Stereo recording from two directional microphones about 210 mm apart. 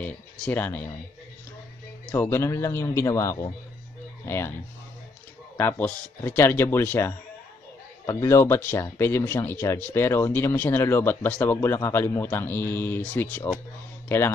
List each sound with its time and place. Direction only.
0.0 s speech: 10° left (ahead or behind)
2.0 s speech: 10° left (ahead or behind)
5.6 s speech: 10° left (ahead or behind)